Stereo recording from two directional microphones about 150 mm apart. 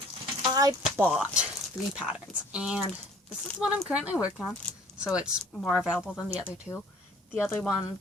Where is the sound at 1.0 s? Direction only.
5° right (ahead or behind).